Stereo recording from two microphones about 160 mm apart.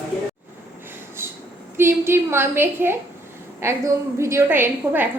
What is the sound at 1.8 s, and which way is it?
A woman's voice, 15° right (ahead or behind).